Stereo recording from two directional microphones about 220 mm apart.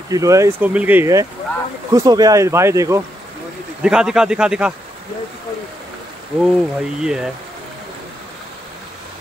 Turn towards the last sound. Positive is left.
turn(degrees=-5)  # may be behind; listen again after turning